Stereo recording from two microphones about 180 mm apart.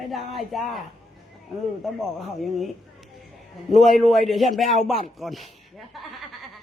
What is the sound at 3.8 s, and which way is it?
Speech, centre (ahead or behind).